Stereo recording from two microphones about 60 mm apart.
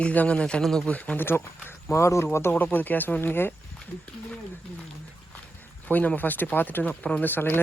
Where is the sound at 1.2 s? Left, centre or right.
Left.